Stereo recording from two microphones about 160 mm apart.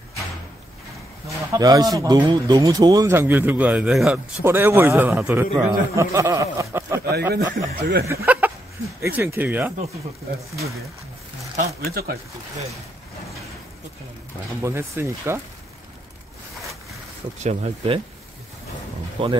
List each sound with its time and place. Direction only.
1.5 s speech: 25° right (ahead or behind)
7.0 s speech: 90° right
7.3 s speech: 75° right (ahead or behind)
8.1 s a sound: 15° right (ahead or behind)
9.0 s speech: 15° right (ahead or behind)
11.8 s speech: 70° right (ahead or behind)
14.6 s speech: 15° right (ahead or behind)
17.4 s speech: 40° right (ahead or behind)
19.2 s speech: 35° right (ahead or behind)